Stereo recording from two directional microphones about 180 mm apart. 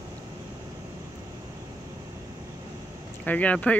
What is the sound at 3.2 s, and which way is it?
Speech, 5° left (ahead or behind).